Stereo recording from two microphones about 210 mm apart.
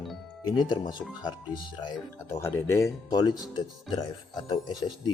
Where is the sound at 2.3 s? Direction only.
15° left (ahead or behind).